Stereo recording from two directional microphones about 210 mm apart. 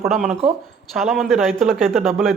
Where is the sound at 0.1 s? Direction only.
Centre (ahead or behind).